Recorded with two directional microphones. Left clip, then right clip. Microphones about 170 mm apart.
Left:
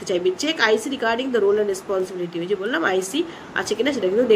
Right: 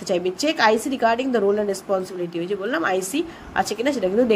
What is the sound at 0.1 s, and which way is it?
A woman's voice, 45° right (ahead or behind).